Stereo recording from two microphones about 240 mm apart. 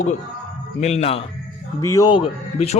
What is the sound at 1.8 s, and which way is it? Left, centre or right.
Mantra, centre.